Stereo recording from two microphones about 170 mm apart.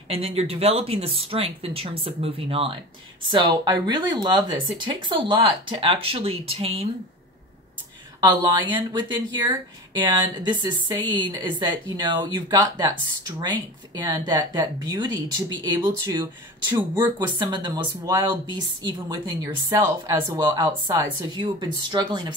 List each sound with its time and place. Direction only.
0.1 s speech: 35° right (ahead or behind)
8.2 s speech: 25° right (ahead or behind)